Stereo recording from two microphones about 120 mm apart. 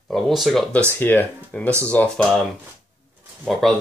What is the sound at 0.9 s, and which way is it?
Speech, 15° left (ahead or behind).